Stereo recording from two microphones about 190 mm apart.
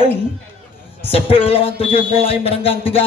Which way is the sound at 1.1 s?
30° left (ahead or behind).